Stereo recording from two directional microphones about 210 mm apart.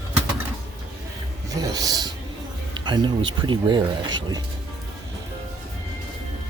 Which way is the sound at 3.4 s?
20° right (ahead or behind).